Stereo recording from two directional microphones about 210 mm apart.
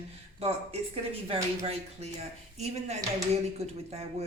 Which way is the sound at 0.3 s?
30° right (ahead or behind).